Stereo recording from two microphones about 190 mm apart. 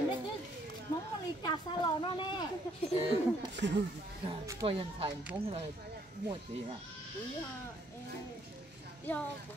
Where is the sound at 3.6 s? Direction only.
65° right (ahead or behind).